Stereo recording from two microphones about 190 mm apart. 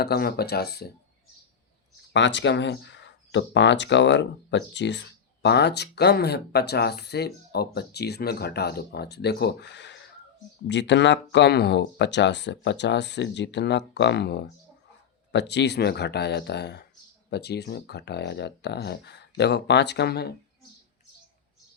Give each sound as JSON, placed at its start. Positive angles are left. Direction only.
{"t": 0.0, "sound": "speech", "side_deg": 55}
{"t": 2.1, "sound": "speech", "side_deg": 70}